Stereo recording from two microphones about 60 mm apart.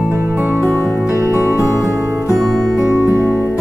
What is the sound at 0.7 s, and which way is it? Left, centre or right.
Music, right.